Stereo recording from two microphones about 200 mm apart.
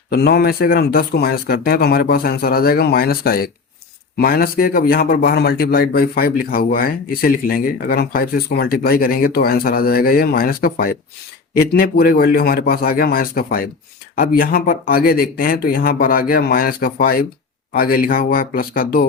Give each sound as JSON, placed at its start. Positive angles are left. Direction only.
{"t": 0.1, "sound": "a man's voice", "side_deg": 50}